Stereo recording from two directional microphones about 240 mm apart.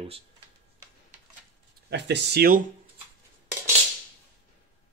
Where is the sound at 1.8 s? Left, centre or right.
Right.